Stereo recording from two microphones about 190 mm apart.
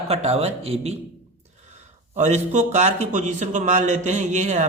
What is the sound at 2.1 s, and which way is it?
A man's voice, 40° right (ahead or behind).